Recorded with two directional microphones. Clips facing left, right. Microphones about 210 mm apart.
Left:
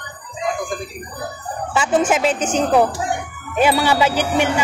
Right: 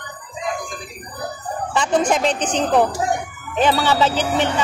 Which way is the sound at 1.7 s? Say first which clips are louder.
Left 1 dB; 5° left (ahead or behind).